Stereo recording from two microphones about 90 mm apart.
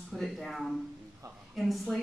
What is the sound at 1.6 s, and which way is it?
Speech, centre (ahead or behind).